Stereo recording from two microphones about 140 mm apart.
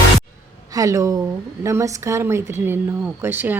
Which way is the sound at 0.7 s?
25° right (ahead or behind).